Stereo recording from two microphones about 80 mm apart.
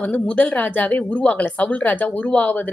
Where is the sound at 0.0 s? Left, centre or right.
Centre.